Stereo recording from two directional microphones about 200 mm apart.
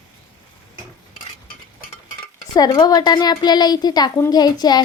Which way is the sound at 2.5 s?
20° left (ahead or behind).